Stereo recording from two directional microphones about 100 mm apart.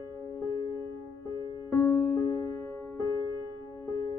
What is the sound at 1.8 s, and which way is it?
Music, 25° left (ahead or behind).